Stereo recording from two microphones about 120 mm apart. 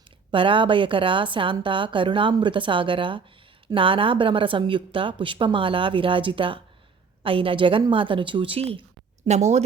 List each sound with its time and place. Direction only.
0.3 s speech: 45° right (ahead or behind)
9.2 s speech: 70° right (ahead or behind)